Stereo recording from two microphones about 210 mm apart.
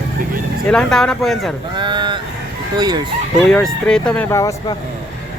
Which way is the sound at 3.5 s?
5° left (ahead or behind).